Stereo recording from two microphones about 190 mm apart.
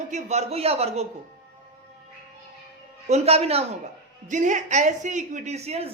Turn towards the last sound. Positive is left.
turn(degrees=-35)  # may be behind; listen again after turning